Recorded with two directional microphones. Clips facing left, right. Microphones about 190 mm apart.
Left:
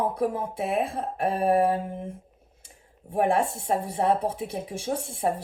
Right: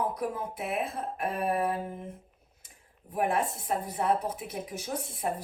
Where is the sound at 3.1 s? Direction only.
30° left (ahead or behind).